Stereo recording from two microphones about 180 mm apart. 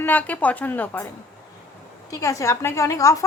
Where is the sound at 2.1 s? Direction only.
20° left (ahead or behind).